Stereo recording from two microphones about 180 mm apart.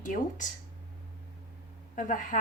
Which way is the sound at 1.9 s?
45° left (ahead or behind).